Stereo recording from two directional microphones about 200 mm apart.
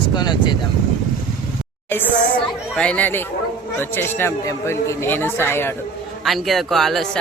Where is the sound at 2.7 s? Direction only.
5° left (ahead or behind).